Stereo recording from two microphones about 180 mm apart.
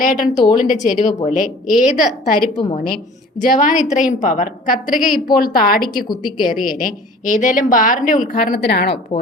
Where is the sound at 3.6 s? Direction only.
45° left (ahead or behind).